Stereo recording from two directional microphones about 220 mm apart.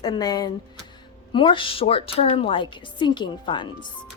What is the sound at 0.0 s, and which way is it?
A woman's voice, 15° left (ahead or behind).